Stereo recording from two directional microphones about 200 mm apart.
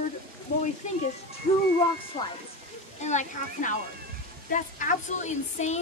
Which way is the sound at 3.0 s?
35° left (ahead or behind).